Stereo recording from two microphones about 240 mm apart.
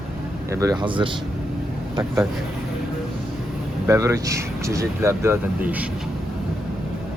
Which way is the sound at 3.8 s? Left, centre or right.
Centre.